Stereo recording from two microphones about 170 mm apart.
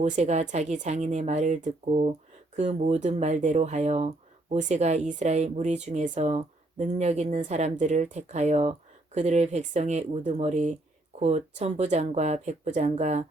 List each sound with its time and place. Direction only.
0.0 s speech: 40° right (ahead or behind)